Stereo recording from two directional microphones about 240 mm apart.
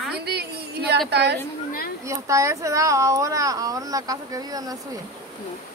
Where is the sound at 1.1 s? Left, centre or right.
Right.